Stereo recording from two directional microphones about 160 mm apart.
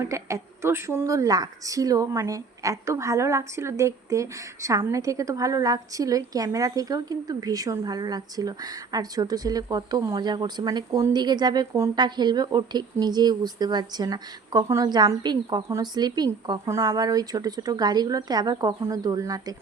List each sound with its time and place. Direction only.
0.0 s a woman's voice: 20° right (ahead or behind)